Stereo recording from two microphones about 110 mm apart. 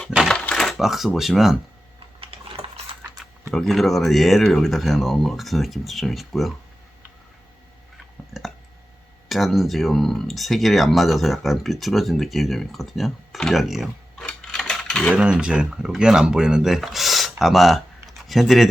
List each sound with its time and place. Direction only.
0.3 s typewriter: 10° left (ahead or behind)
0.7 s speech: 5° right (ahead or behind)
2.2 s sewing machine: 60° right (ahead or behind)
3.5 s speech: centre (ahead or behind)
8.3 s a sound: centre (ahead or behind)
9.3 s speech: centre (ahead or behind)
14.3 s a sound: 5° left (ahead or behind)
15.1 s speech: 10° right (ahead or behind)